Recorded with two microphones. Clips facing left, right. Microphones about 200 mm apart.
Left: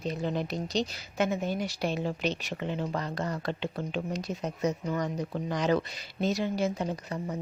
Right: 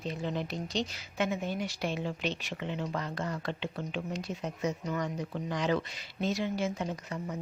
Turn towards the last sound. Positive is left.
turn(degrees=35)  # may be behind; listen again after turning